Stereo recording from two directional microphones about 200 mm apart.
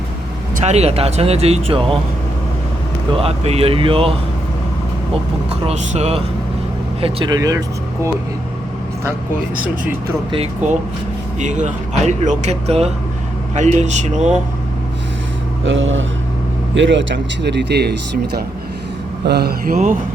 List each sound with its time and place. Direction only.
0.5 s speech: 35° right (ahead or behind)
3.1 s speech: 30° right (ahead or behind)
5.6 s speech: 35° right (ahead or behind); by 7.6 s 20° right (ahead or behind)
10.3 s speech: 30° right (ahead or behind)
15.6 s speech: 75° right (ahead or behind); by 17.9 s 55° right (ahead or behind)
19.2 s speech: 55° right (ahead or behind)